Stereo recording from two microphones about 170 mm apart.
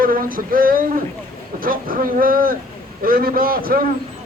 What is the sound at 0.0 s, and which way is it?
A man's voice, 55° right (ahead or behind).